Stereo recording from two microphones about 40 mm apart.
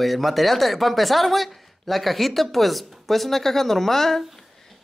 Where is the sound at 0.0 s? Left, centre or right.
Centre.